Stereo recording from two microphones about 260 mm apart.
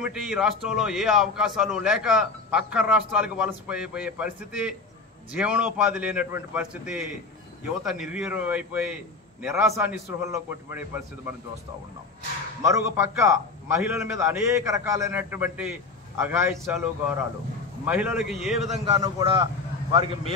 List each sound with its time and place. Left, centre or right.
0.0 s a man's voice: centre
12.6 s a man's voice: centre
18.9 s a man's voice: centre